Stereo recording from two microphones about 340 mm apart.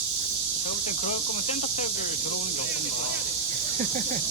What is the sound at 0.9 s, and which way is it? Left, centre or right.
Speech, centre.